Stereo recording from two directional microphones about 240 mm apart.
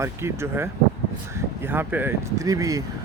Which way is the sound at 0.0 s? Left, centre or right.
Centre.